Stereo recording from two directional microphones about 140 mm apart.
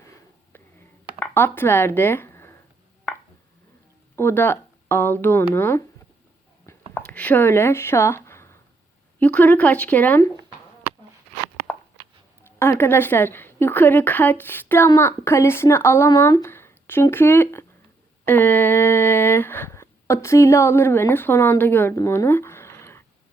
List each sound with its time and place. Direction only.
0.0 s wheeze: 20° left (ahead or behind)
1.2 s speech: 15° left (ahead or behind)
4.1 s speech: 15° left (ahead or behind)
6.7 s a sound: 15° left (ahead or behind)
9.1 s a woman's voice: 10° left (ahead or behind)
12.4 s a sound: 15° left (ahead or behind)
12.8 s a woman's voice: 15° left (ahead or behind)